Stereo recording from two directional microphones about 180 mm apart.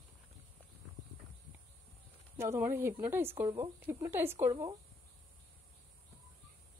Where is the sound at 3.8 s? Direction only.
15° right (ahead or behind).